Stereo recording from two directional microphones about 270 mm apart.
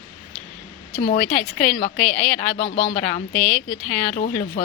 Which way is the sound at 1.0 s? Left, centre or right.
Left.